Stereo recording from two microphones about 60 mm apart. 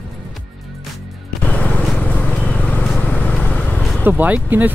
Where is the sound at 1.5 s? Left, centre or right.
Left.